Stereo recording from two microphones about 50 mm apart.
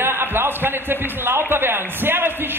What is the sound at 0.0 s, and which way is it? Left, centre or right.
A man's voice, right.